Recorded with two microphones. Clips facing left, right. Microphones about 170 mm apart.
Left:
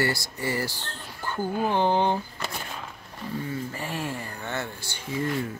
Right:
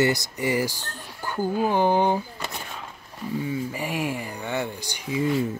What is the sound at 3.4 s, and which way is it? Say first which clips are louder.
Speech: right 4 dB; 10° right (ahead or behind).